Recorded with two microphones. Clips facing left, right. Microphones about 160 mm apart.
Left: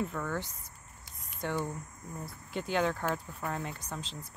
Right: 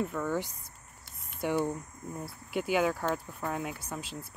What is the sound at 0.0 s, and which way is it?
Speech, 5° right (ahead or behind).